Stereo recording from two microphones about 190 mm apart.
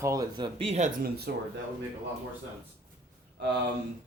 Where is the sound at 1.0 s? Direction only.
55° right (ahead or behind).